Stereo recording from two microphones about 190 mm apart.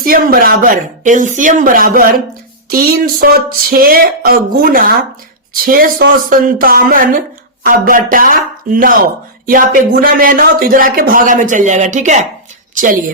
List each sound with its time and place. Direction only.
0.0 s a woman's voice: 50° right (ahead or behind)